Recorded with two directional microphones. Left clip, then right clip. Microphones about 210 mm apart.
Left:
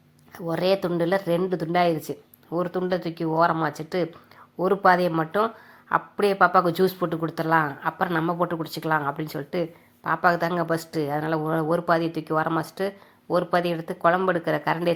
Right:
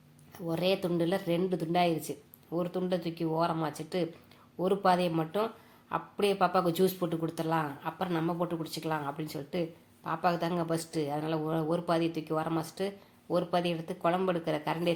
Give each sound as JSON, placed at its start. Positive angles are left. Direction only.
{"t": 0.3, "sound": "speech", "side_deg": 20}